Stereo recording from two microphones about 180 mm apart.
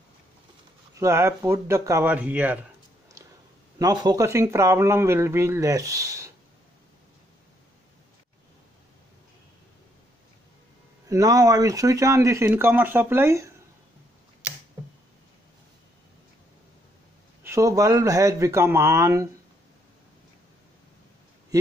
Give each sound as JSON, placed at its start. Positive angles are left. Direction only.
{"t": 0.9, "sound": "speech", "side_deg": -15}
{"t": 3.8, "sound": "speech", "side_deg": -20}
{"t": 11.1, "sound": "speech", "side_deg": -20}
{"t": 17.4, "sound": "speech", "side_deg": -15}